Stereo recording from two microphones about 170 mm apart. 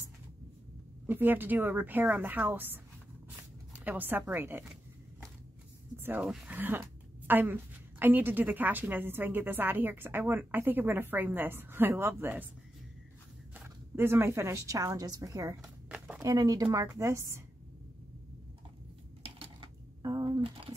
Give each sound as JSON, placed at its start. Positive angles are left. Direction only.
{"t": 1.0, "sound": "a woman's voice", "side_deg": -10}
{"t": 3.8, "sound": "a woman's voice", "side_deg": -10}
{"t": 5.9, "sound": "a woman's voice", "side_deg": -10}
{"t": 13.6, "sound": "speech", "side_deg": -15}
{"t": 15.6, "sound": "a sound", "side_deg": -5}
{"t": 16.2, "sound": "a woman's voice", "side_deg": -20}
{"t": 19.2, "sound": "typing", "side_deg": -30}